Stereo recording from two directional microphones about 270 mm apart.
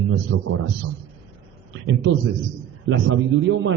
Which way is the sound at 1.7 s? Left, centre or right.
Right.